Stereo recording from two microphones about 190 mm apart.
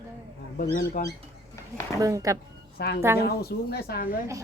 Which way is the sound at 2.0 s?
20° right (ahead or behind).